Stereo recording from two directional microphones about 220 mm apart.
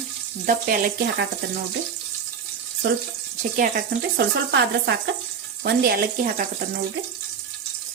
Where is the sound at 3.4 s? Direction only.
35° right (ahead or behind).